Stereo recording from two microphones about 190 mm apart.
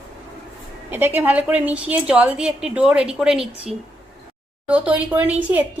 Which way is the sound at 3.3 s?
30° right (ahead or behind).